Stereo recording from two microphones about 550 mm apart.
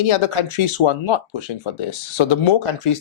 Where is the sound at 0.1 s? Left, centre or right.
Left.